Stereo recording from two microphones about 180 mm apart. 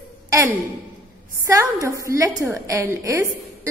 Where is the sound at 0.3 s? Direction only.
15° right (ahead or behind).